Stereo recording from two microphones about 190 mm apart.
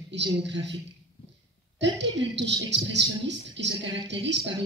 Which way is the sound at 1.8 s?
65° right (ahead or behind).